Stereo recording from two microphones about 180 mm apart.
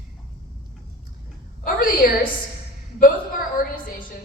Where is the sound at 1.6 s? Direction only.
50° left (ahead or behind).